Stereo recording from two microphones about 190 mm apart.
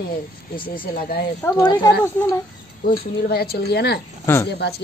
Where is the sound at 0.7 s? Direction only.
50° left (ahead or behind).